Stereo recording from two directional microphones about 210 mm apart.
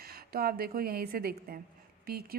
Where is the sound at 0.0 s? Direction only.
45° right (ahead or behind).